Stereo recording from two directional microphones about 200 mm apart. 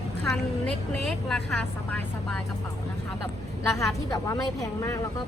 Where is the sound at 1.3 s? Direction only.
5° left (ahead or behind).